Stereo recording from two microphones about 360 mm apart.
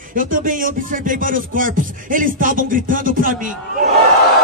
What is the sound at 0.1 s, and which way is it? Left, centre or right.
Speech, right.